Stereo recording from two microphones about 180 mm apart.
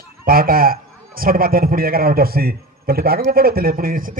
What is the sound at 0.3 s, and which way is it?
A man's voice, 55° right (ahead or behind).